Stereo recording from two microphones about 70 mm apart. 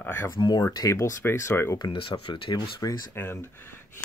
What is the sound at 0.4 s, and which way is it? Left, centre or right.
Speech, left.